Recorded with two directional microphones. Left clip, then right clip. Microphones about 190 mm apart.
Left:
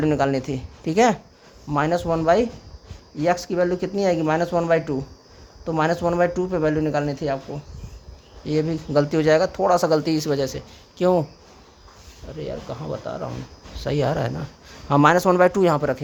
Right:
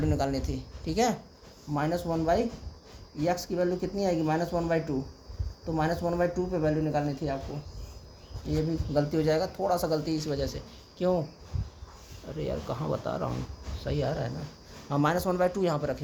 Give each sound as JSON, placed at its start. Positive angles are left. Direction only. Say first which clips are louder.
{"t": 0.0, "sound": "speech", "louder": "left 9 dB", "side_deg": 45}
{"t": 8.4, "sound": "speech", "louder": "left 8 dB", "side_deg": 50}
{"t": 12.4, "sound": "speech", "louder": "left 2 dB", "side_deg": 0}
{"t": 13.8, "sound": "speech", "louder": "left 9 dB", "side_deg": 45}